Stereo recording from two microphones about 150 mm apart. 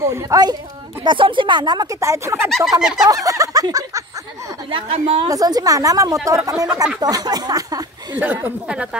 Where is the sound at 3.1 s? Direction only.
20° right (ahead or behind).